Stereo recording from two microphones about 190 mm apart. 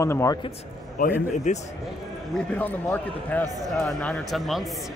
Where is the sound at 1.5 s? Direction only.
40° left (ahead or behind).